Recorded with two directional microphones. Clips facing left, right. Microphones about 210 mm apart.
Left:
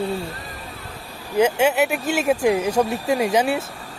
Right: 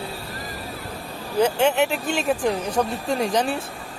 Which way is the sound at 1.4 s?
10° left (ahead or behind).